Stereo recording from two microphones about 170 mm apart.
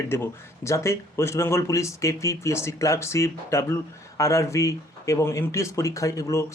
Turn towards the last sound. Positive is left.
turn(degrees=20)  # may be behind; listen again after turning